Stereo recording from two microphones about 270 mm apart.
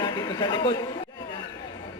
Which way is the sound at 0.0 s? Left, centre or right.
Centre.